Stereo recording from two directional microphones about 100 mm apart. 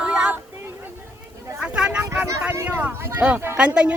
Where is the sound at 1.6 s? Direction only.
10° right (ahead or behind).